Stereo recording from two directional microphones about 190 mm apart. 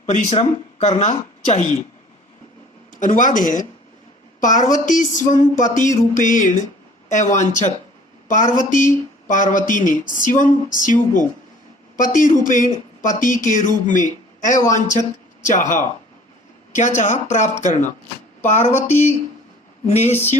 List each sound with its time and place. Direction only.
0.0 s speech: 40° left (ahead or behind)
2.9 s speech: 45° left (ahead or behind)
19.9 s speech: 35° left (ahead or behind)